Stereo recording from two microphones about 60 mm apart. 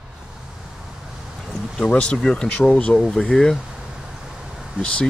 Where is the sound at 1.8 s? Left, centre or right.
Centre.